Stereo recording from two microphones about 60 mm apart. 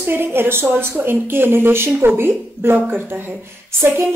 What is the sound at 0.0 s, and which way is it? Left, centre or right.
A woman's voice, right.